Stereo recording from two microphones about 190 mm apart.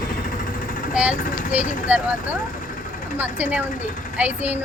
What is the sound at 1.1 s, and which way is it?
Vehicle, 45° left (ahead or behind).